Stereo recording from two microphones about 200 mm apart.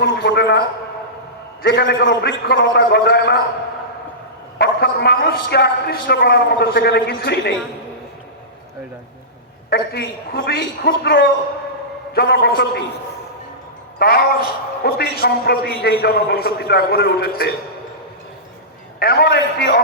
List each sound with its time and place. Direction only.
0.0 s a man's voice: 55° left (ahead or behind)
1.6 s a man's voice: 60° left (ahead or behind)
4.5 s a man's voice: 55° left (ahead or behind)
9.6 s a man's voice: 50° left (ahead or behind)
14.0 s a man's voice: 50° left (ahead or behind)
18.9 s a man's voice: 50° left (ahead or behind)